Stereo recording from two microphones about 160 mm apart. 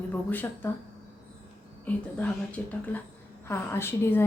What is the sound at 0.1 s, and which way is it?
Speech, 10° left (ahead or behind).